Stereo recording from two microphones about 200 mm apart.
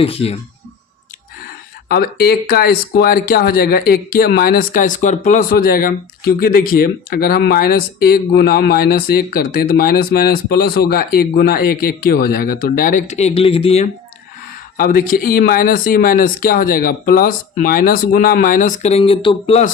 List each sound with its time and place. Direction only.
0.0 s speech: 30° left (ahead or behind)
1.9 s speech: 50° left (ahead or behind); by 13.9 s 30° left (ahead or behind)
14.8 s speech: 45° left (ahead or behind)